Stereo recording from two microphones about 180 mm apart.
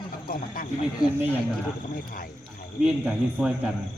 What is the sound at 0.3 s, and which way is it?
Speech, 50° left (ahead or behind).